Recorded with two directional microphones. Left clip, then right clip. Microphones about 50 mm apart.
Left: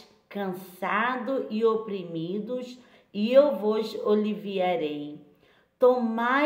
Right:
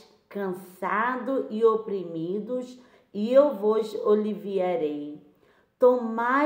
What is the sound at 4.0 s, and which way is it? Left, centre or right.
Speech, centre.